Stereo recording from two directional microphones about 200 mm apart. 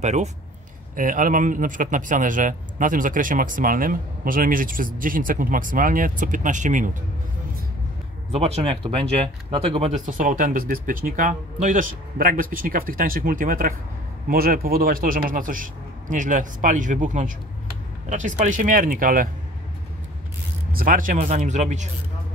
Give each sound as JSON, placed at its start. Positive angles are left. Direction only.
{"t": 0.0, "sound": "speech", "side_deg": -35}
{"t": 8.3, "sound": "speech", "side_deg": -30}
{"t": 10.0, "sound": "speech", "side_deg": -40}
{"t": 20.7, "sound": "speech", "side_deg": -45}